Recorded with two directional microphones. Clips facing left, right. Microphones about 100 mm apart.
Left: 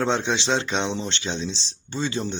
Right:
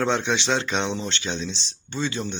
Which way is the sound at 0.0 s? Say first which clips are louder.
Even; 25° left (ahead or behind).